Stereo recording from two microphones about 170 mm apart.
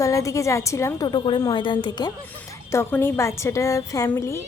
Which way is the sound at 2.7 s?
15° left (ahead or behind).